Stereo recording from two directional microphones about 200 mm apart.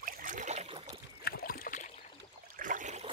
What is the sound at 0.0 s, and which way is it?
Boat, 40° right (ahead or behind).